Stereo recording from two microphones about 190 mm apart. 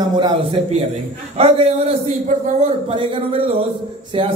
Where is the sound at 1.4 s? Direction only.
30° right (ahead or behind).